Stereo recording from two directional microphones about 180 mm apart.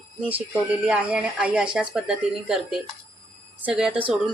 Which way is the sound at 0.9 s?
5° right (ahead or behind).